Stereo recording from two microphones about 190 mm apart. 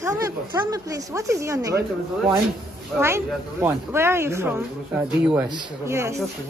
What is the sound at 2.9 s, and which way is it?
Speech, 15° right (ahead or behind).